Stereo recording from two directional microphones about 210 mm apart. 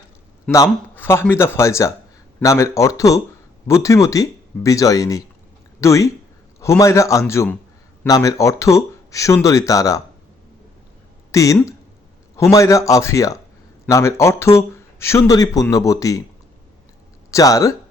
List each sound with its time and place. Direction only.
0.5 s speech: 15° left (ahead or behind)
11.3 s speech: 15° left (ahead or behind)
17.3 s speech: 15° left (ahead or behind)